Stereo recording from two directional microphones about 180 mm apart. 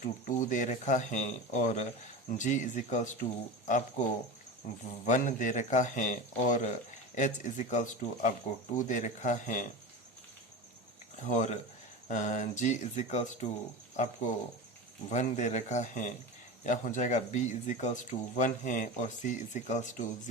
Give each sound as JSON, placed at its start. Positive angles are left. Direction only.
{"t": 0.0, "sound": "speech", "side_deg": 45}
{"t": 11.2, "sound": "speech", "side_deg": 40}